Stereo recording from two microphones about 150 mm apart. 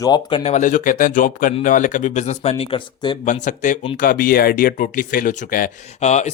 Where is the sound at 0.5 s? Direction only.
60° left (ahead or behind); by 3.2 s 30° left (ahead or behind).